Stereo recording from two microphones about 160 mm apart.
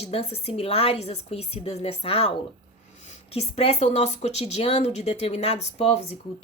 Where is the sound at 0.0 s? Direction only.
40° left (ahead or behind).